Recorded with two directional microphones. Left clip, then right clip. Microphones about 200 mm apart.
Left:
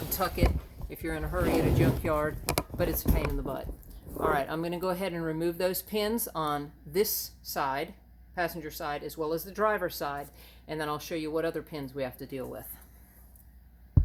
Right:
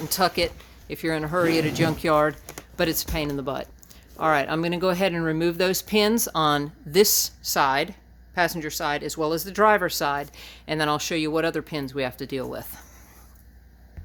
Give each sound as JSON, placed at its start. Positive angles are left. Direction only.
{"t": 0.2, "sound": "speech", "side_deg": -40}